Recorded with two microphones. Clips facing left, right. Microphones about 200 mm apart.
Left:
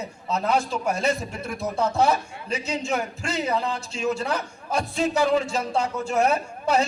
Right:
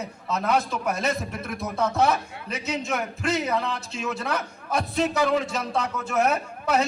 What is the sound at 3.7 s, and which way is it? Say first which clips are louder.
A man's voice: left 4 dB; 30° left (ahead or behind).